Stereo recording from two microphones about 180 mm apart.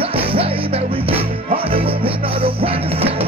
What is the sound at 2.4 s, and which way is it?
Music, 30° right (ahead or behind).